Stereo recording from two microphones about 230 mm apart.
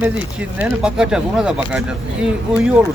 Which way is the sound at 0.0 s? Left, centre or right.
Centre.